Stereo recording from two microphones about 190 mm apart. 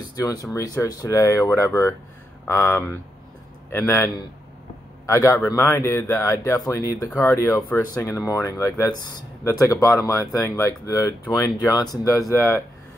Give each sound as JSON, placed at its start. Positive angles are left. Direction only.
{"t": 0.1, "sound": "speech", "side_deg": 20}